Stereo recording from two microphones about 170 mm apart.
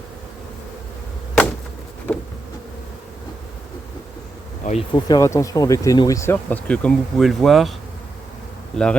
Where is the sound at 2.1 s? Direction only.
10° left (ahead or behind).